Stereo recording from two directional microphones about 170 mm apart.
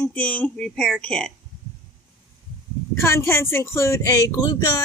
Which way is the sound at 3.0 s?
15° left (ahead or behind).